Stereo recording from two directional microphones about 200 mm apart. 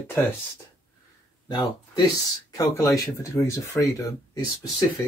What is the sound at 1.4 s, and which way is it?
Speech, 20° left (ahead or behind).